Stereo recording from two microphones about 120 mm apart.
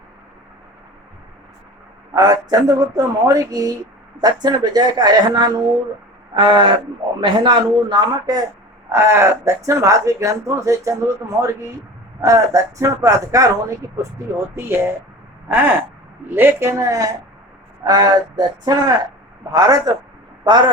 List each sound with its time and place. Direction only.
2.1 s speech: 35° right (ahead or behind)
6.3 s a sound: 45° right (ahead or behind)
7.2 s speech: 40° right (ahead or behind)
8.9 s speech: 25° right (ahead or behind)
15.4 s a sound: 15° right (ahead or behind)
16.3 s a man's voice: 20° right (ahead or behind); by 20.7 s 40° right (ahead or behind)